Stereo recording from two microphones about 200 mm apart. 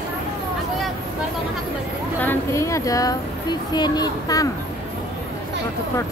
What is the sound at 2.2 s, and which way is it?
Speech, 10° left (ahead or behind).